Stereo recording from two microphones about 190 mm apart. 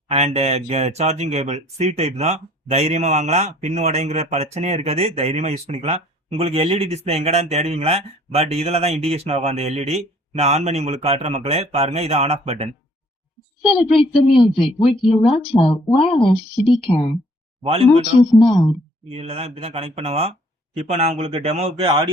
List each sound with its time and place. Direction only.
0.1 s speech: 35° right (ahead or behind)
14.3 s speech: 30° left (ahead or behind)
17.6 s speech: 30° right (ahead or behind)
18.2 s speech: 25° left (ahead or behind)
19.1 s speech: 30° right (ahead or behind)